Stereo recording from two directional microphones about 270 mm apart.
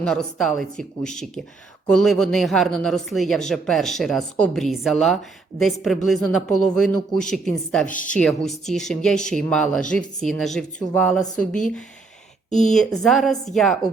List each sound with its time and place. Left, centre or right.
0.0 s speech: centre
7.9 s a woman's voice: left
8.1 s speech: centre
12.5 s speech: left
12.7 s speech: centre